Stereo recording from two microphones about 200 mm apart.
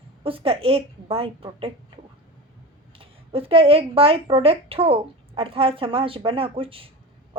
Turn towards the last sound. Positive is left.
turn(degrees=-25)  # may be behind; listen again after turning